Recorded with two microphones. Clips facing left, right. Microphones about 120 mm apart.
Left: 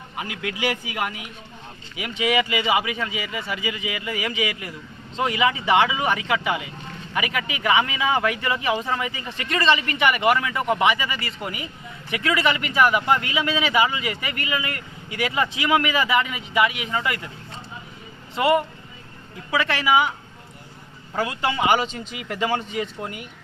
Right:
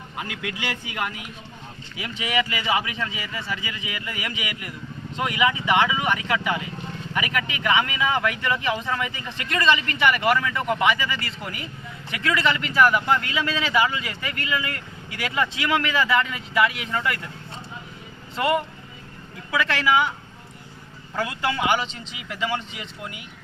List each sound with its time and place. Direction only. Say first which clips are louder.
0.2 s speech: left 4 dB; 15° left (ahead or behind)
2.2 s speech: left 4 dB; 20° left (ahead or behind)
9.8 s speech: left 1 dB; 15° left (ahead or behind)
10.8 s speech: left 1 dB; 20° left (ahead or behind)
11.4 s speech: left 2 dB; 10° left (ahead or behind)
18.3 s speech: left 3 dB; 15° left (ahead or behind)
21.2 s speech: left 2 dB; 20° left (ahead or behind)
21.8 s speech: left 4 dB; 50° left (ahead or behind)